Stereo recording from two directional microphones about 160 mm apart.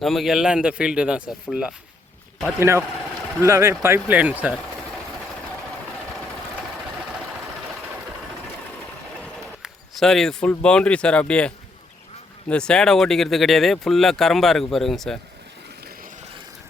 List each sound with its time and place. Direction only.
0.0 s speech: centre (ahead or behind)
2.6 s speech: 15° right (ahead or behind)
9.6 s basketball bounce: centre (ahead or behind)
10.5 s speech: 5° left (ahead or behind)